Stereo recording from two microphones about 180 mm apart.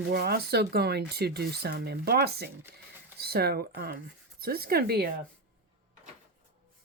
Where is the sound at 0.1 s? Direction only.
60° right (ahead or behind).